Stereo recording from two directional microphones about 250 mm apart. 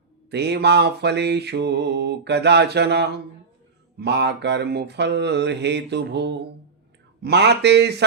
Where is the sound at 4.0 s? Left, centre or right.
Right.